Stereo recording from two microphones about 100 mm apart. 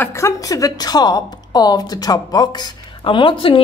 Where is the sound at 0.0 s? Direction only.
30° left (ahead or behind).